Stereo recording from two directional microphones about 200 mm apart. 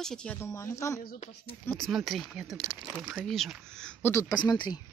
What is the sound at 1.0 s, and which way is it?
Speech, 35° left (ahead or behind).